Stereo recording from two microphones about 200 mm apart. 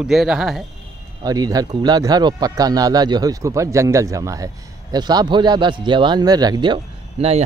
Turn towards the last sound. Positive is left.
turn(degrees=-30)  # may be behind; listen again after turning